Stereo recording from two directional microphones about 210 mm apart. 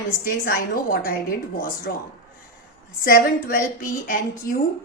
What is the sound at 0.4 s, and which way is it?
A woman's voice, 45° left (ahead or behind).